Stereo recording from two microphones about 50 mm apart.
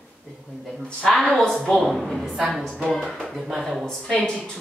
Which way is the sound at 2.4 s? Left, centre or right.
Centre.